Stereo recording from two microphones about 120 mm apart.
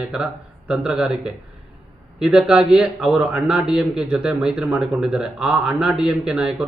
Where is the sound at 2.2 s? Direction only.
5° right (ahead or behind).